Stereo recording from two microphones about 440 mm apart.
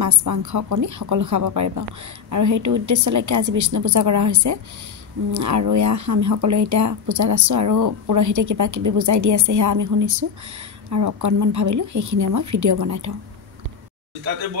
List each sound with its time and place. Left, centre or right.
0.0 s speech: right